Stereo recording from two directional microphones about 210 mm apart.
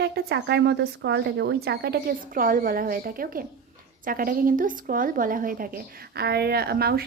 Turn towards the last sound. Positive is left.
turn(degrees=-50)  # may be behind; listen again after turning